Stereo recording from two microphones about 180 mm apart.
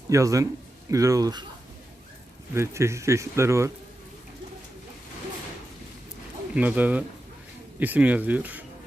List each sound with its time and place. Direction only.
0.1 s speech: 15° right (ahead or behind)
2.6 s speech: 15° right (ahead or behind)
6.5 s speech: 10° right (ahead or behind)